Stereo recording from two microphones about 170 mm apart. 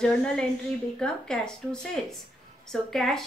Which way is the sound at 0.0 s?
5° left (ahead or behind).